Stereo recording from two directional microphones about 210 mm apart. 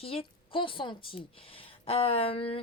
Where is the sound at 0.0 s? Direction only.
25° left (ahead or behind).